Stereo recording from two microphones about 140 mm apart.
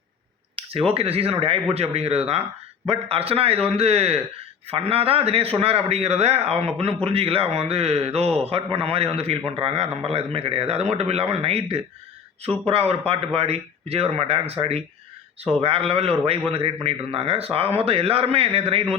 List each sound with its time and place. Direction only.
0.5 s a man's voice: 45° right (ahead or behind)